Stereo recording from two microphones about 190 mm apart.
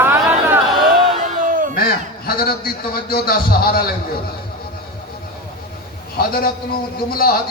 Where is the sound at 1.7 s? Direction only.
50° left (ahead or behind).